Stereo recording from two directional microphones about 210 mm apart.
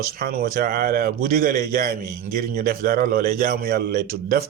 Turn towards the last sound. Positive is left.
turn(degrees=-45)  # may be behind; listen again after turning